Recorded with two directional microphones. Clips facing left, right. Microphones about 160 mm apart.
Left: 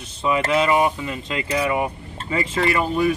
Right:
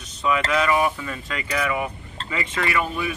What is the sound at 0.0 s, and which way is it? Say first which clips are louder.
Speech: left 2 dB; 30° left (ahead or behind).